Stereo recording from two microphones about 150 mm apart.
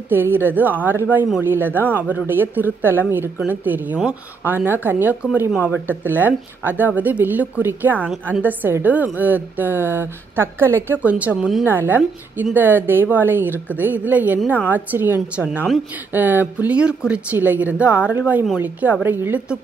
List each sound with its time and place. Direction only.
0.1 s a woman's voice: 15° right (ahead or behind)